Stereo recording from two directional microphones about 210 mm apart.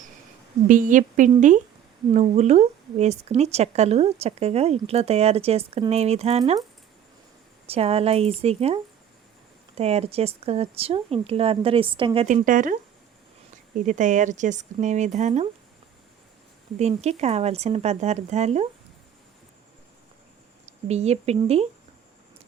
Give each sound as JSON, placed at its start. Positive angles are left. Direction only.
{"t": 0.7, "sound": "speech", "side_deg": -40}
{"t": 7.7, "sound": "speech", "side_deg": -30}
{"t": 16.7, "sound": "speech", "side_deg": -30}
{"t": 20.8, "sound": "speech", "side_deg": -30}